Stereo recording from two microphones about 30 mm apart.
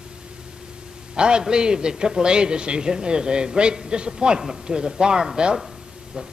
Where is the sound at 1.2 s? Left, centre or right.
Right.